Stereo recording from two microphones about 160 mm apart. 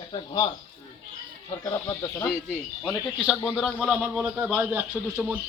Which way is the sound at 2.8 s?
5° left (ahead or behind).